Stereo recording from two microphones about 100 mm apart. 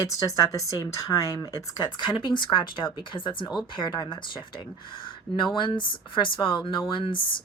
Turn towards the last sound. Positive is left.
turn(degrees=55)  # may be behind; listen again after turning